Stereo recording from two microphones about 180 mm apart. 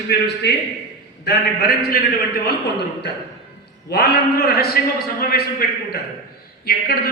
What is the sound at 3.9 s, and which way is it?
Speech, 60° left (ahead or behind).